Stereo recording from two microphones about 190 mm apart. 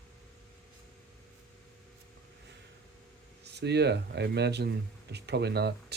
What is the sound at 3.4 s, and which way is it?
Speech, 60° right (ahead or behind).